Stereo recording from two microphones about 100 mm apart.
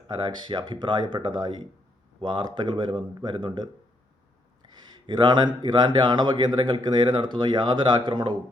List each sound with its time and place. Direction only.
0.1 s speech: 50° right (ahead or behind)